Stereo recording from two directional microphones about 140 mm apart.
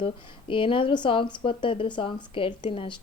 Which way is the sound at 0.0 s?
40° left (ahead or behind).